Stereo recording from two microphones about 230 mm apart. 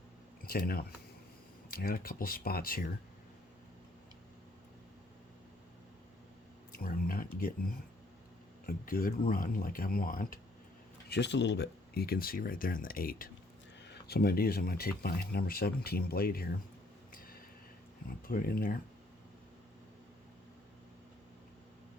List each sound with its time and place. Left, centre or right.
0.4 s speech: left
6.7 s speech: left
8.6 s speech: left
11.1 s speech: left
17.1 s a sound: left
18.3 s speech: left